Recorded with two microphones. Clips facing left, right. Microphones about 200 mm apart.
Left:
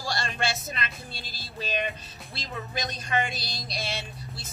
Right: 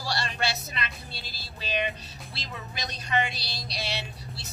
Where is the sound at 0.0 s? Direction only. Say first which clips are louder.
Even; 50° left (ahead or behind).